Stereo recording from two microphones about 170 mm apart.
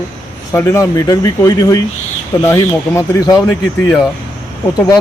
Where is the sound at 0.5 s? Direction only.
15° left (ahead or behind).